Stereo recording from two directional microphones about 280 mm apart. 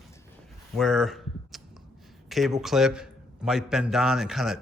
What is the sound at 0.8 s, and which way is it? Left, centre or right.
A man's voice, centre.